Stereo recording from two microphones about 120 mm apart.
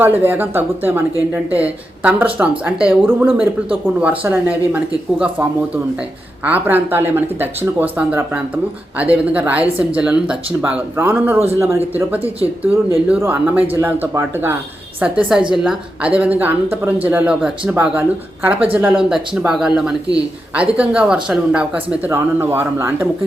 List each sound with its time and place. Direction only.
0.0 s speech: 15° right (ahead or behind)
15.0 s speech: 10° right (ahead or behind)